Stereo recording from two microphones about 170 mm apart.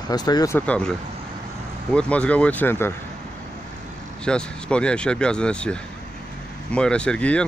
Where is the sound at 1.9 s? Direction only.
5° left (ahead or behind).